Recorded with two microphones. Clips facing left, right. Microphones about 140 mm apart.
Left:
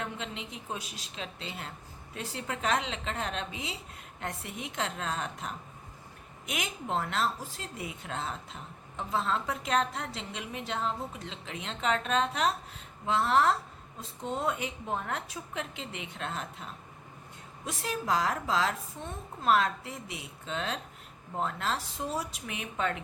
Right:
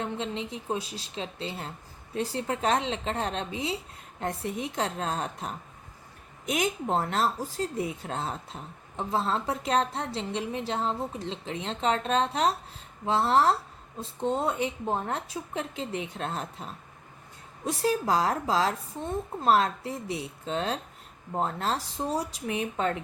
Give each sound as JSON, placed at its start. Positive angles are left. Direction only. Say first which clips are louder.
{"t": 0.0, "sound": "a woman's voice", "louder": "right 6 dB", "side_deg": -30}
{"t": 17.7, "sound": "a woman's voice", "louder": "right 6 dB", "side_deg": -35}